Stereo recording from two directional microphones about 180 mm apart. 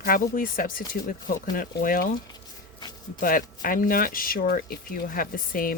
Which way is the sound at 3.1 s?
50° left (ahead or behind).